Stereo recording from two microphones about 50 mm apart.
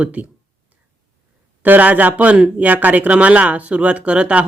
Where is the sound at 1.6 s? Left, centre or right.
Right.